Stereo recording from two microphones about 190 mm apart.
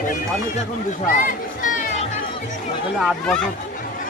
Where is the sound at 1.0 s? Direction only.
45° left (ahead or behind).